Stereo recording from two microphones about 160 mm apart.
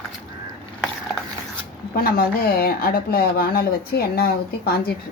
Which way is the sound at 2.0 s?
70° left (ahead or behind).